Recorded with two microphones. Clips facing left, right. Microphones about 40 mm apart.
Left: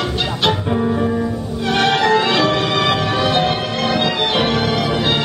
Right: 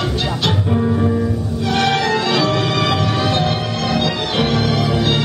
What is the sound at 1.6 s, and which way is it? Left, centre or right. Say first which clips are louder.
Music: left 2 dB; left.